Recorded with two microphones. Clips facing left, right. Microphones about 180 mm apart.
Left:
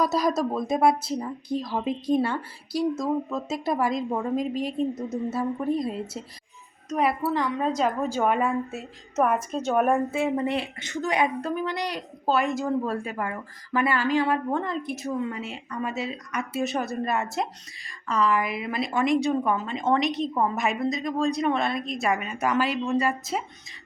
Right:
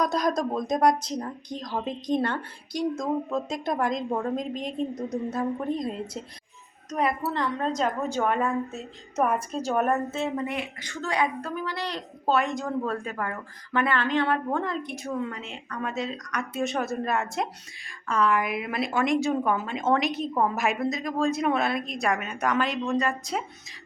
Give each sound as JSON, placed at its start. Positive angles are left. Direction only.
{"t": 0.0, "sound": "a woman's voice", "side_deg": 5}
{"t": 10.3, "sound": "a woman's voice", "side_deg": 30}
{"t": 12.2, "sound": "speech", "side_deg": 0}